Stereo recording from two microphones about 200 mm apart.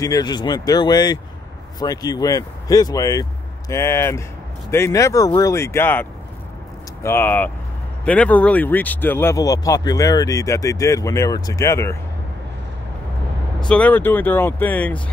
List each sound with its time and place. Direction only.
0.0 s speech: 20° left (ahead or behind)
13.6 s speech: 5° left (ahead or behind)